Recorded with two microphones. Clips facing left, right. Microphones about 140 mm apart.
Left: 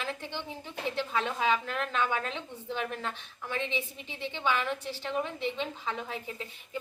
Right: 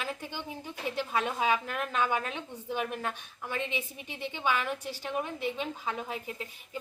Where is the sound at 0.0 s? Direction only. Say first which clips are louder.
Left 1 dB; 10° right (ahead or behind).